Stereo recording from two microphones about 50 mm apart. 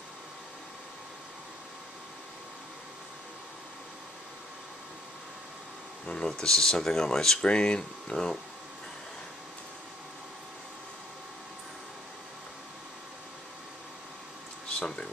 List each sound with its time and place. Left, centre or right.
6.0 s speech: centre
14.8 s speech: left